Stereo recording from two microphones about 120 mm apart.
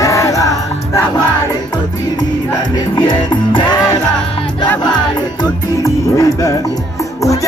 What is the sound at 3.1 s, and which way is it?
Music, 40° left (ahead or behind).